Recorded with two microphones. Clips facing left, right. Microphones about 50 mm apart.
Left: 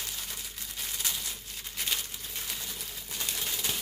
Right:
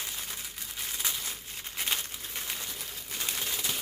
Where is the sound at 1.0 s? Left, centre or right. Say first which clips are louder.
Right 1 dB; centre.